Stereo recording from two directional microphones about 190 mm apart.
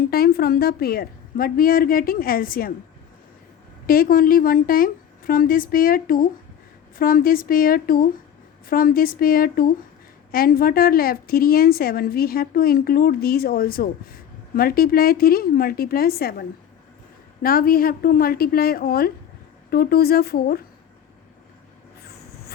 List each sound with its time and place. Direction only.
0.0 s a woman's voice: 55° left (ahead or behind)
3.8 s a woman's voice: 50° left (ahead or behind)